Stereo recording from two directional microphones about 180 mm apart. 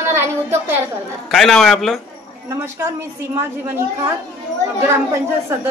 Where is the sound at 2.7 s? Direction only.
15° right (ahead or behind).